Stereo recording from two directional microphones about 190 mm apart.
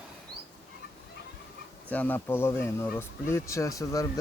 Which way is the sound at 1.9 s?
10° left (ahead or behind).